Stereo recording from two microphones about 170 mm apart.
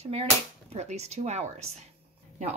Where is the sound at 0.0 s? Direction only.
35° right (ahead or behind).